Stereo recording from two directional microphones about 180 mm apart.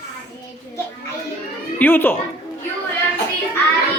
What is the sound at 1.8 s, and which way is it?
Speech, 10° left (ahead or behind).